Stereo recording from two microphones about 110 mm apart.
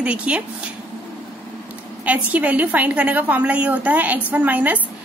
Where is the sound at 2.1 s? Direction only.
15° right (ahead or behind).